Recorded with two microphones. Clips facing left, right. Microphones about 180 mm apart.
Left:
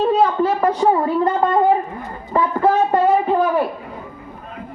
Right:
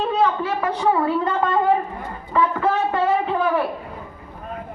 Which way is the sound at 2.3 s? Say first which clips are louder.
Left 4 dB; 45° left (ahead or behind).